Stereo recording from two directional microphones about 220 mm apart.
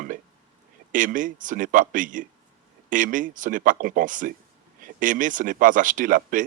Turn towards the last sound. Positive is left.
turn(degrees=-35)  # may be behind; listen again after turning